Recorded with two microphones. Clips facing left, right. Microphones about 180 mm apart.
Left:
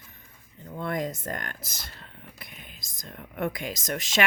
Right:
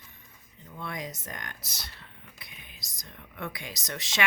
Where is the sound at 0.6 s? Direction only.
50° left (ahead or behind).